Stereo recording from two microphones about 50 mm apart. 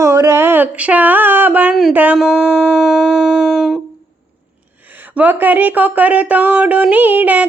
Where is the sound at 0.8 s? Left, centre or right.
Right.